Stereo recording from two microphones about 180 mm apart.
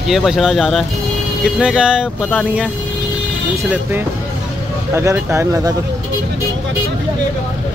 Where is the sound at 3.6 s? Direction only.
10° right (ahead or behind).